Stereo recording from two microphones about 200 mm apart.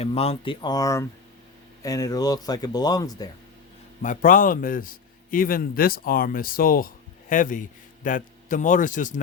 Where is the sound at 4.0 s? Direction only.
40° left (ahead or behind).